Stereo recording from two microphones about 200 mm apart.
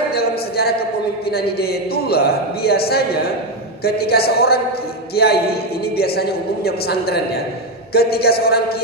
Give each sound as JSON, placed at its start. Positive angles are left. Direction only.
{"t": 0.1, "sound": "a man's voice", "side_deg": 50}